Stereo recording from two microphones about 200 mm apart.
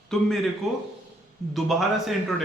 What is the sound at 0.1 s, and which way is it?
Speech, centre (ahead or behind).